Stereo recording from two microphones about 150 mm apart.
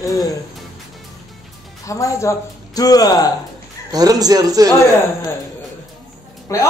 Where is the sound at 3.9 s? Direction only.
25° right (ahead or behind).